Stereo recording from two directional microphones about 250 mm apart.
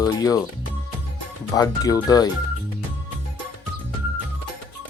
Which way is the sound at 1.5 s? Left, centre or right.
Centre.